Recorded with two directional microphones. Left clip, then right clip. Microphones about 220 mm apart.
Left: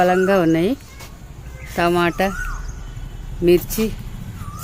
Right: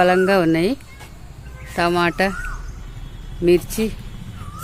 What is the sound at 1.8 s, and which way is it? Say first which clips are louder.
Speech: even; centre (ahead or behind).